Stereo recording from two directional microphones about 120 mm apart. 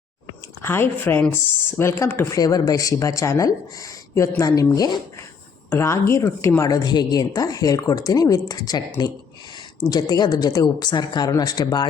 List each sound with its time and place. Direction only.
0.6 s speech: 20° left (ahead or behind); by 11.9 s 35° left (ahead or behind)